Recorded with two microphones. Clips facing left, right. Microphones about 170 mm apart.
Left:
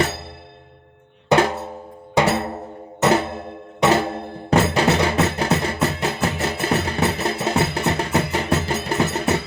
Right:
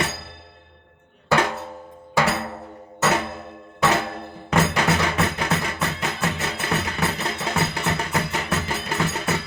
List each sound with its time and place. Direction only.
1.3 s drum: 30° left (ahead or behind)
2.1 s music: 30° left (ahead or behind)
3.8 s music: 25° left (ahead or behind)